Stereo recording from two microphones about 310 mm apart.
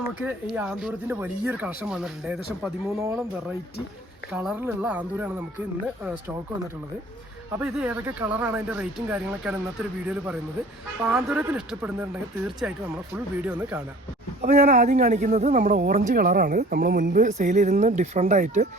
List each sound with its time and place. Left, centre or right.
0.5 s speech: centre
4.4 s speech: centre
7.6 s speech: centre
14.4 s speech: right